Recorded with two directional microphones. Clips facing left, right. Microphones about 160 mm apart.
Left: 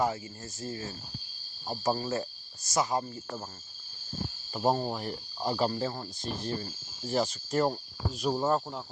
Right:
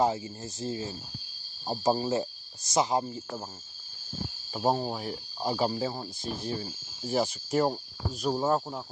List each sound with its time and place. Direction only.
0.0 s speech: 20° right (ahead or behind)
4.5 s speech: 5° right (ahead or behind)